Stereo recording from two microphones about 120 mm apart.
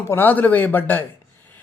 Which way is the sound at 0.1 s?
15° left (ahead or behind).